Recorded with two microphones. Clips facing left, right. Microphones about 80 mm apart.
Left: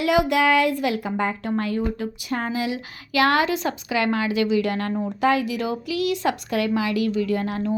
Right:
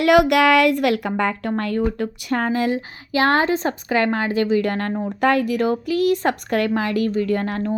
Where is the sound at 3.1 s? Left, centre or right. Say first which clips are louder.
Right 2 dB; right.